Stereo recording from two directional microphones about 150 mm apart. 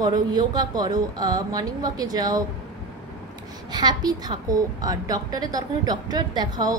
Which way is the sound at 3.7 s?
30° right (ahead or behind).